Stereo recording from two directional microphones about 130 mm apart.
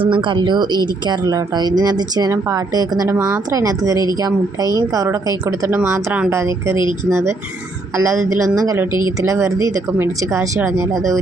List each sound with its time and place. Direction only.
0.0 s speech: 40° right (ahead or behind); by 6.7 s 20° right (ahead or behind)
6.7 s speech: 40° left (ahead or behind)
7.1 s speech: 25° right (ahead or behind)
8.9 s speech: 35° left (ahead or behind)
9.2 s speech: 25° right (ahead or behind)